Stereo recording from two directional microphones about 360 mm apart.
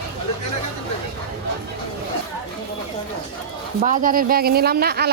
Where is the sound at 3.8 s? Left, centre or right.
Right.